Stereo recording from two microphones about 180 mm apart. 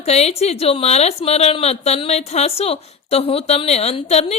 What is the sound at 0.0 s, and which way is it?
A woman's voice, 35° left (ahead or behind).